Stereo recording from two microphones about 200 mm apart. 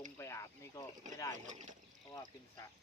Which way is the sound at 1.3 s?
35° right (ahead or behind).